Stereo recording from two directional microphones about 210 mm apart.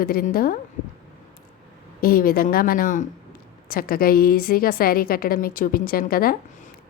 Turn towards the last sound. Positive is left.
turn(degrees=45)  # may be behind; listen again after turning